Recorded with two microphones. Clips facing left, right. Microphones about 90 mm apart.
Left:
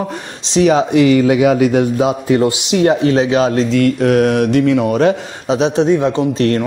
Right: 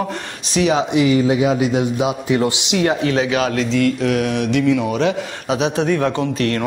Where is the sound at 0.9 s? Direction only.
65° left (ahead or behind).